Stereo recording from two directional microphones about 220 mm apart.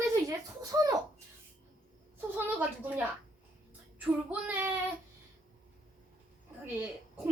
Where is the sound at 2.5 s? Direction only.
5° right (ahead or behind).